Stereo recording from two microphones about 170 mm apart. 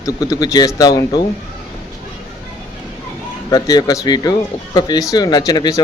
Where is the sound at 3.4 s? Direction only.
20° left (ahead or behind).